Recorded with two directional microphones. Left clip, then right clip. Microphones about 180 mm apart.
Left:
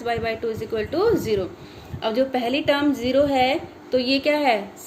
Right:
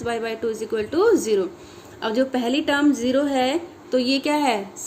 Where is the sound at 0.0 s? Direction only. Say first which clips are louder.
Left 1 dB; 50° right (ahead or behind).